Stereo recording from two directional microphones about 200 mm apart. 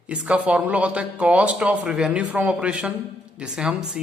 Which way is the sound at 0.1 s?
5° right (ahead or behind).